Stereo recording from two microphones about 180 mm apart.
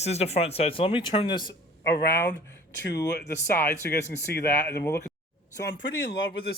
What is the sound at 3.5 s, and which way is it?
Speech, 10° left (ahead or behind).